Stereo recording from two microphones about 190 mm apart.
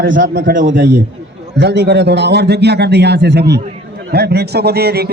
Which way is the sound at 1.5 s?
60° right (ahead or behind).